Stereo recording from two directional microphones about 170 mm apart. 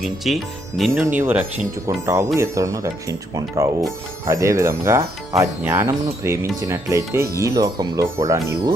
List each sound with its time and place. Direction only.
0.0 s speech: centre (ahead or behind)
1.0 s speech: 15° right (ahead or behind)